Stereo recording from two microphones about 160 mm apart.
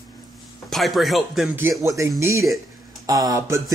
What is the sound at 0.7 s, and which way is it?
Speech, centre (ahead or behind).